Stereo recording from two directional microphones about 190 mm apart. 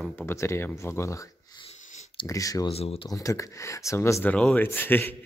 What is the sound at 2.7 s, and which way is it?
Speech, 30° left (ahead or behind).